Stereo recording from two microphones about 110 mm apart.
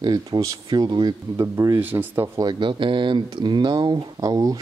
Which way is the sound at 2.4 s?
45° right (ahead or behind).